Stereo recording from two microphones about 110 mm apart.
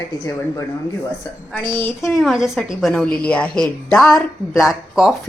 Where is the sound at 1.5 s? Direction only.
10° left (ahead or behind).